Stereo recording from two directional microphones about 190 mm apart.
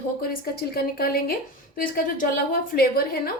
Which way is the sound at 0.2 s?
55° left (ahead or behind).